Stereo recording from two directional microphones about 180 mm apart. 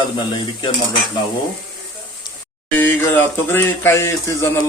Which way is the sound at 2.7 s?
10° left (ahead or behind).